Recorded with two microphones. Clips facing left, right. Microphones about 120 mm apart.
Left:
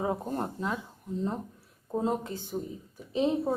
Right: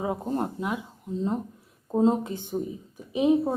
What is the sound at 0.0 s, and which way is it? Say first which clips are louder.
Speech: right 3 dB; 15° right (ahead or behind).